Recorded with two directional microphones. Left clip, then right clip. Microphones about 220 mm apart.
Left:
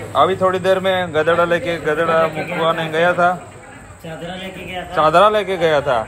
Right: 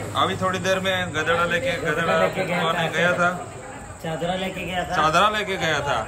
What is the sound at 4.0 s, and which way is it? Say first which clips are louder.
Speech: right 3 dB; 30° right (ahead or behind).